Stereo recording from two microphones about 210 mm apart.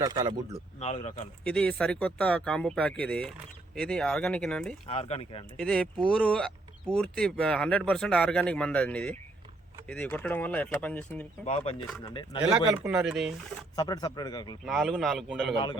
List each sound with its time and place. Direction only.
0.0 s speech: 20° right (ahead or behind)
0.8 s a man's voice: 30° left (ahead or behind)
1.5 s speech: 5° left (ahead or behind)
4.9 s a man's voice: 30° left (ahead or behind)
5.5 s speech: 5° left (ahead or behind)
11.4 s a man's voice: 30° left (ahead or behind)
12.5 s speech: 5° right (ahead or behind)
13.7 s a man's voice: 20° left (ahead or behind)
14.6 s speech: centre (ahead or behind)
15.5 s a man's voice: 20° left (ahead or behind)